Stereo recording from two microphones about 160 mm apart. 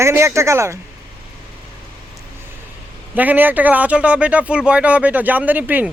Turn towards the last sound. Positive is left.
turn(degrees=-10)  # may be behind; listen again after turning